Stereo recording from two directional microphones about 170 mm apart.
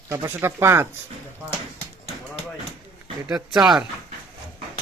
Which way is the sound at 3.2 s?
5° right (ahead or behind).